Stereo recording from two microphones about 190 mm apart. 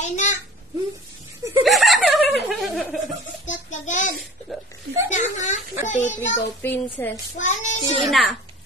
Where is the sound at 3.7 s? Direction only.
40° left (ahead or behind).